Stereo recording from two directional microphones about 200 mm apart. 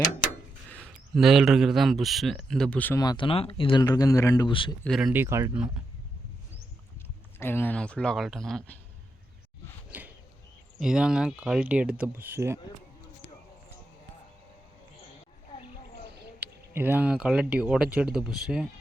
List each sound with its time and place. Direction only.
0.7 s a man's voice: centre (ahead or behind)
3.0 s speech: 20° left (ahead or behind)
4.8 s speech: centre (ahead or behind)
7.3 s speech: 10° left (ahead or behind)
9.9 s a sound: 10° right (ahead or behind)
10.8 s speech: 5° right (ahead or behind)
16.7 s speech: 10° right (ahead or behind)